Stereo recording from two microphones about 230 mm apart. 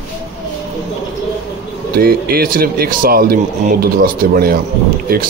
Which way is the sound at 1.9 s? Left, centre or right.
Right.